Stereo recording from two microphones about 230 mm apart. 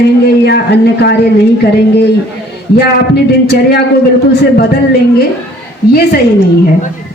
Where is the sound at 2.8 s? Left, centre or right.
Left.